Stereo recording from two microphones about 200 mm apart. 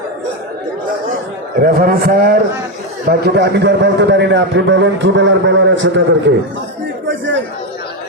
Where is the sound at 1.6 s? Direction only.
45° right (ahead or behind); by 6.4 s 60° right (ahead or behind).